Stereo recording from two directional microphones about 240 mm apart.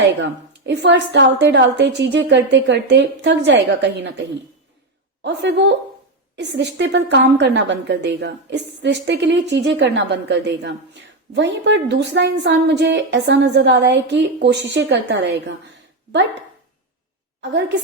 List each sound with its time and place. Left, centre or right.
0.1 s a woman's voice: right
5.2 s a woman's voice: right